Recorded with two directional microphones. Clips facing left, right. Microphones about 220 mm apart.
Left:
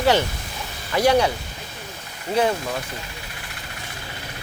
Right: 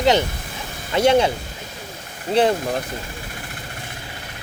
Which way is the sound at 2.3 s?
30° right (ahead or behind).